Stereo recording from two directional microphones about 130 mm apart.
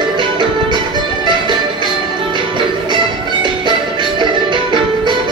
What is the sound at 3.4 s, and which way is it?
Music, 35° right (ahead or behind).